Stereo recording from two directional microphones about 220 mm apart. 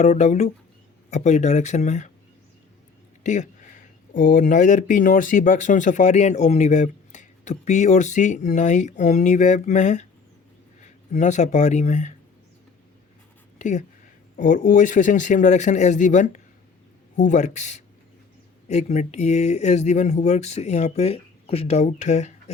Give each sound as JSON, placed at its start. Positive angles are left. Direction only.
{"t": 0.0, "sound": "speech", "side_deg": 30}
{"t": 3.2, "sound": "speech", "side_deg": 35}
{"t": 13.6, "sound": "speech", "side_deg": 35}